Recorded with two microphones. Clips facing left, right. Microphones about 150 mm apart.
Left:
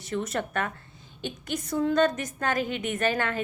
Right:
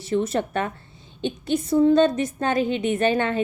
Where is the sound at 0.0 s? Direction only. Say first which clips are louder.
Right 7 dB; 30° right (ahead or behind).